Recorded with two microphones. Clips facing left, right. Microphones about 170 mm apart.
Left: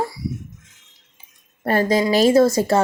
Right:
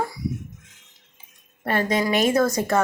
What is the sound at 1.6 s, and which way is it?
Speech, 35° left (ahead or behind).